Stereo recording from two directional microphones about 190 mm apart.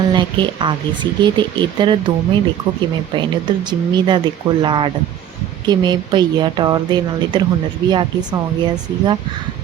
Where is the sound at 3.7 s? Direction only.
25° right (ahead or behind).